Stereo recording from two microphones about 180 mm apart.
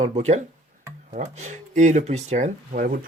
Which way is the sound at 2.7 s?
55° right (ahead or behind).